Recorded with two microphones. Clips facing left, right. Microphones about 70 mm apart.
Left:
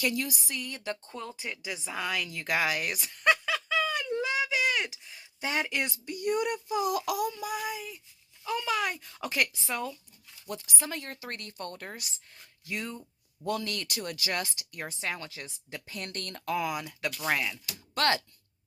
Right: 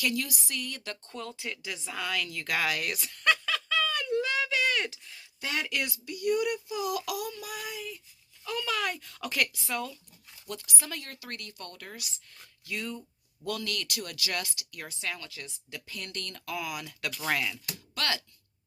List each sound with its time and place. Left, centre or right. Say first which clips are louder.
0.0 s a woman's voice: left 1 dB; left; by 4.0 s centre
4.0 s a sound: right 1 dB; left
5.8 s speech: even; left
7.3 s child singing: left 5 dB; left
8.4 s a woman's voice: left 2 dB; centre; by 16.8 s left
17.2 s a woman's voice: even; centre
17.9 s speech: left 6 dB; left